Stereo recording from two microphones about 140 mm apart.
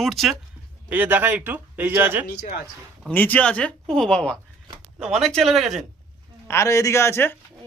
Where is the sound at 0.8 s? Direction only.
15° right (ahead or behind).